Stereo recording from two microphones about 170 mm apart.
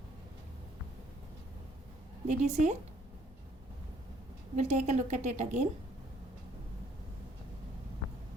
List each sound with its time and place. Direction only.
2.2 s a woman's voice: 45° right (ahead or behind)
4.5 s a woman's voice: 45° right (ahead or behind)